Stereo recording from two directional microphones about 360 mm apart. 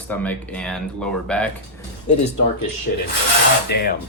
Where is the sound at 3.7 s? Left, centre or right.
Left.